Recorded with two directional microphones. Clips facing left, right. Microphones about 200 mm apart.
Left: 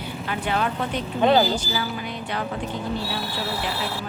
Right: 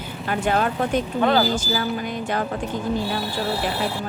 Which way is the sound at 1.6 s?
45° right (ahead or behind).